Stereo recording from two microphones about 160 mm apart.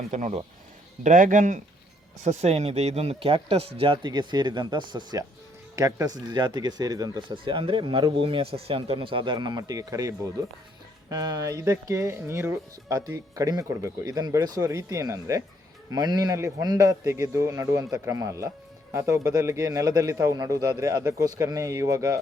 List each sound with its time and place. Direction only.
0.1 s speech: 50° right (ahead or behind)
2.2 s speech: 45° right (ahead or behind); by 22.2 s 20° right (ahead or behind)